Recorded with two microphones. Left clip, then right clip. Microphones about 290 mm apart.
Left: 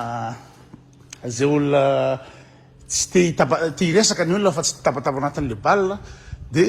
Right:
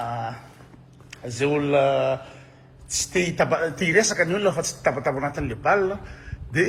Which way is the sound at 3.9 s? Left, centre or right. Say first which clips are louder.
Left 1 dB; left.